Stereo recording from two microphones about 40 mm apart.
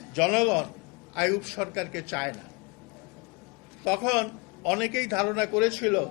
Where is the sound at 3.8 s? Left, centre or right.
Centre.